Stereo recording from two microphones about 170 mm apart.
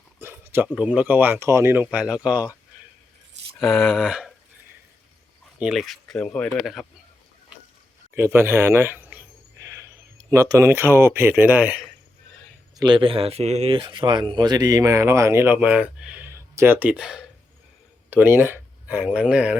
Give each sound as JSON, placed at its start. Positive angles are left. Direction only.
{"t": 0.2, "sound": "speech", "side_deg": -15}
{"t": 3.6, "sound": "speech", "side_deg": 5}
{"t": 5.5, "sound": "speech", "side_deg": -5}
{"t": 8.1, "sound": "a sound", "side_deg": -15}
{"t": 10.2, "sound": "speech", "side_deg": -15}
{"t": 12.7, "sound": "speech", "side_deg": -25}